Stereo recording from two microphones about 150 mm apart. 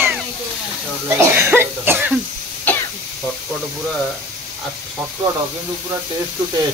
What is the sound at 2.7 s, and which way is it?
Throat clearing, 10° left (ahead or behind).